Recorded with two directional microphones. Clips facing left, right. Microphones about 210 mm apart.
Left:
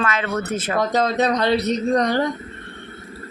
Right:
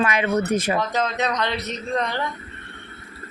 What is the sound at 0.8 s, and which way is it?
Speech, 35° left (ahead or behind).